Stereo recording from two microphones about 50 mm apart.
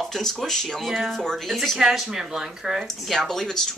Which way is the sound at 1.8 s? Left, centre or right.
Centre.